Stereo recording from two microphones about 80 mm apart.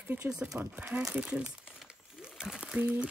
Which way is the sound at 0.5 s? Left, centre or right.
Centre.